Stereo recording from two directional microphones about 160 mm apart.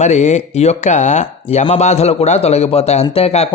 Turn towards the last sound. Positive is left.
turn(degrees=40)  # may be behind; listen again after turning